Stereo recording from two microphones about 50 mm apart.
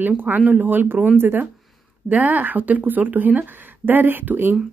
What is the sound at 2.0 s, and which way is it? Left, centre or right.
Speech, right.